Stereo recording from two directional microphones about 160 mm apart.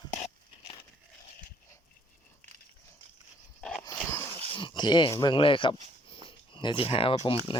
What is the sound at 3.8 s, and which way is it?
Dog, 20° left (ahead or behind).